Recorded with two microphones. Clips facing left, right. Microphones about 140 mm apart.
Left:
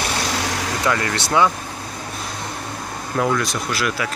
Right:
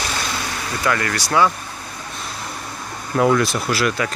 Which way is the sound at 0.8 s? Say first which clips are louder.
Right 1 dB; 20° left (ahead or behind).